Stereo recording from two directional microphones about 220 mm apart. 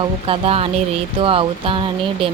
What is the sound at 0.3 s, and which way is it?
Speech, 25° right (ahead or behind).